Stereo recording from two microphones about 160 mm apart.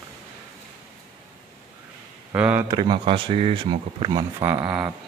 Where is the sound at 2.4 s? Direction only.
10° right (ahead or behind).